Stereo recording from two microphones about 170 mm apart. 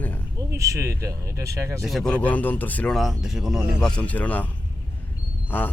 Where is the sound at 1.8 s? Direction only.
Centre (ahead or behind).